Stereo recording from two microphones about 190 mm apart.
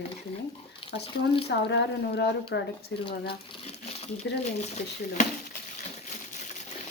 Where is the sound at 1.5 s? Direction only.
60° left (ahead or behind).